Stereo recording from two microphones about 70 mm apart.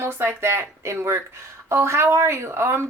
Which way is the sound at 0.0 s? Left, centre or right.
Right.